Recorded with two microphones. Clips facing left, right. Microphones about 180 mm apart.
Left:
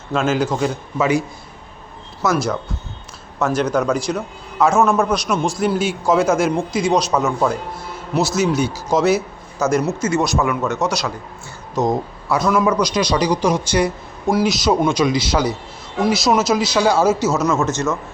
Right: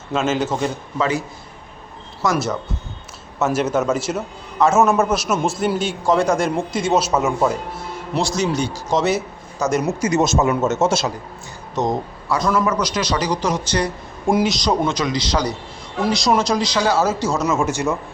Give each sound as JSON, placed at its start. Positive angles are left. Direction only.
{"t": 0.1, "sound": "a man's voice", "side_deg": 0}
{"t": 0.9, "sound": "a man's voice", "side_deg": 10}
{"t": 2.2, "sound": "a man's voice", "side_deg": 5}
{"t": 8.1, "sound": "a man's voice", "side_deg": 5}
{"t": 9.8, "sound": "speech", "side_deg": -15}
{"t": 11.7, "sound": "a man's voice", "side_deg": 0}